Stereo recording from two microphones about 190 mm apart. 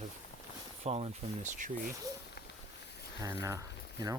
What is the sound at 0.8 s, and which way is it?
Speech, 35° right (ahead or behind).